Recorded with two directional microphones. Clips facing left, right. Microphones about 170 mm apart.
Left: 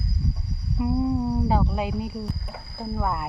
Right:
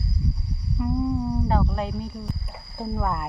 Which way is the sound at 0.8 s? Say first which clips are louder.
Left 2 dB; 15° left (ahead or behind).